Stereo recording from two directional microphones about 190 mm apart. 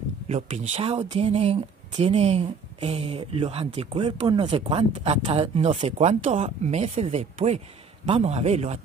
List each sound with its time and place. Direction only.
0.3 s speech: 35° right (ahead or behind)